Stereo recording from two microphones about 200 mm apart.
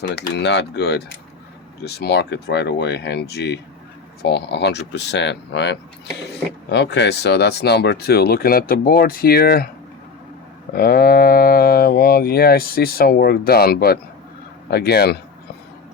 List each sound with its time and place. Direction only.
0.1 s speech: 60° left (ahead or behind)
10.8 s speech: 50° left (ahead or behind)